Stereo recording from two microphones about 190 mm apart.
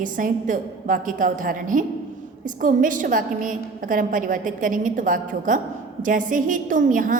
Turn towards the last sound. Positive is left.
turn(degrees=-45)  # may be behind; listen again after turning